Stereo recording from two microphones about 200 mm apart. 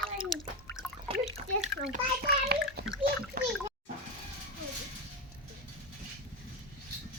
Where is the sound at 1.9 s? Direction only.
50° right (ahead or behind).